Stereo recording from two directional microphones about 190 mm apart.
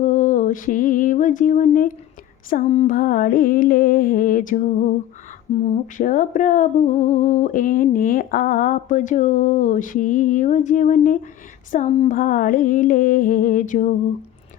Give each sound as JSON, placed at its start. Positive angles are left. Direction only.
{"t": 0.0, "sound": "mantra", "side_deg": 45}
{"t": 2.5, "sound": "speech", "side_deg": 40}